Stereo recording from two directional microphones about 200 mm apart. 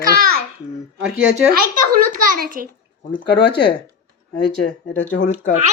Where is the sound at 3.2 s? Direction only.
60° left (ahead or behind).